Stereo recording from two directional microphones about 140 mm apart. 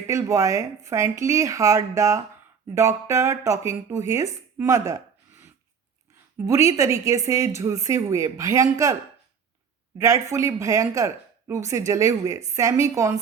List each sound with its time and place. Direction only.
0.1 s a woman's voice: 20° right (ahead or behind)
4.5 s a sound: 20° right (ahead or behind)
6.4 s a woman's voice: 25° right (ahead or behind)
10.0 s a woman's voice: 25° right (ahead or behind)